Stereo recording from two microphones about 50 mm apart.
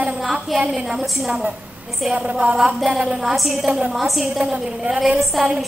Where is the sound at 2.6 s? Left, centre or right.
Centre.